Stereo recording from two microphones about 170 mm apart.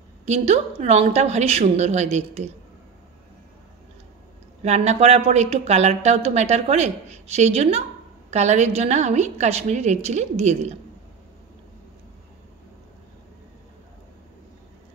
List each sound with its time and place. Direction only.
0.2 s speech: 40° right (ahead or behind)
4.6 s speech: 40° right (ahead or behind)